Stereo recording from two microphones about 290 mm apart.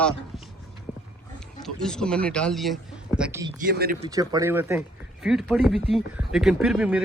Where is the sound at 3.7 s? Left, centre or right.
Right.